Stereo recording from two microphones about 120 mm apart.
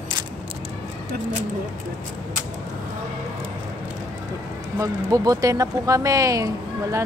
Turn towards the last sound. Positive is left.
turn(degrees=-30)  # may be behind; listen again after turning